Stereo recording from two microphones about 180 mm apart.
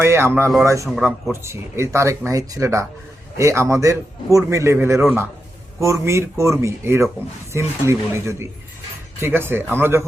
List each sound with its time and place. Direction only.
0.0 s a man's voice: 15° right (ahead or behind)
0.9 s speech: 5° right (ahead or behind)
1.3 s a man's voice: 15° right (ahead or behind)